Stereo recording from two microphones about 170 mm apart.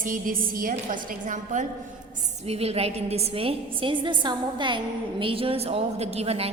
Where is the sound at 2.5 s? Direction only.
35° right (ahead or behind).